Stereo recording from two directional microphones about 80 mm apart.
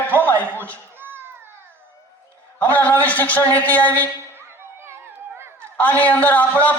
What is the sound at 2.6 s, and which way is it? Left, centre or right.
A man's voice, left.